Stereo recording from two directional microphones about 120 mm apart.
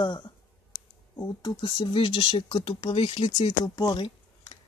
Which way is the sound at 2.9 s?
55° left (ahead or behind).